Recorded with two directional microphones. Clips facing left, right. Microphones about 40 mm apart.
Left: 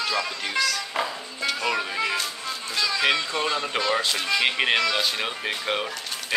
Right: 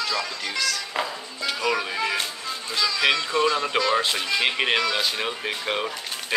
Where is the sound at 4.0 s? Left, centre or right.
Centre.